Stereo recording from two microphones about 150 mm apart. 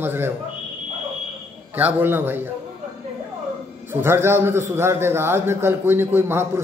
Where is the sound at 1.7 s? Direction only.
15° right (ahead or behind).